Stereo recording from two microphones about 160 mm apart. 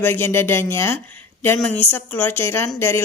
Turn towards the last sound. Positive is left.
turn(degrees=15)  # may be behind; listen again after turning